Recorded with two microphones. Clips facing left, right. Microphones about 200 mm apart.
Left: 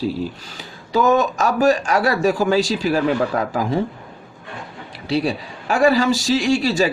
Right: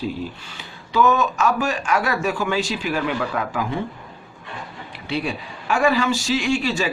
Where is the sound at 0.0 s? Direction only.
40° left (ahead or behind).